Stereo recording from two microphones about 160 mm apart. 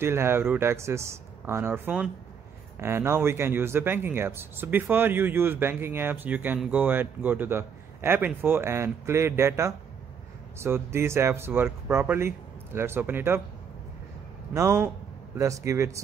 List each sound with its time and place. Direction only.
0.0 s speech: 15° right (ahead or behind)
14.5 s speech: 15° right (ahead or behind)